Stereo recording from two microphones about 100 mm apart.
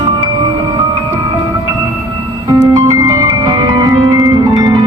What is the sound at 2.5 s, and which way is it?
Music, 35° right (ahead or behind).